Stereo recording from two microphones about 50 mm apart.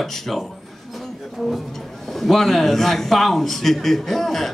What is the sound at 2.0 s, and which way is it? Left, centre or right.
A man's voice, centre.